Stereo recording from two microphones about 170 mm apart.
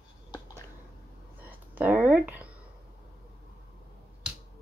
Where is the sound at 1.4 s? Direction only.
10° right (ahead or behind).